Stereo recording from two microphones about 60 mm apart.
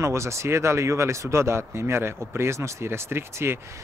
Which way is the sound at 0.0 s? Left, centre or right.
Right.